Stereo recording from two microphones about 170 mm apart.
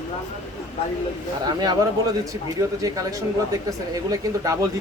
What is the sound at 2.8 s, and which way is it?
Speech, 20° right (ahead or behind).